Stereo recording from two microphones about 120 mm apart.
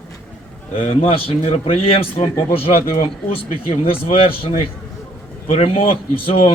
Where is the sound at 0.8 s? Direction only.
50° left (ahead or behind).